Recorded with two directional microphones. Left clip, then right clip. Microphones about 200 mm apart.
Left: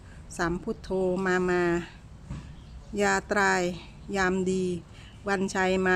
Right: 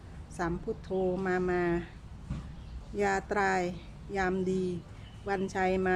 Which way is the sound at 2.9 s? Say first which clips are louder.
Left 4 dB; 30° left (ahead or behind).